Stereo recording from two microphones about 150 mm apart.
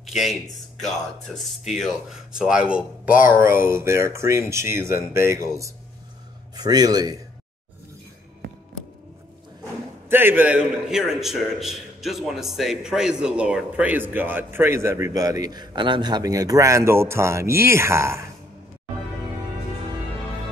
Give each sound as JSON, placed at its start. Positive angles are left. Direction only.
{"t": 0.0, "sound": "a man's voice", "side_deg": 0}
{"t": 10.0, "sound": "a man's voice", "side_deg": -15}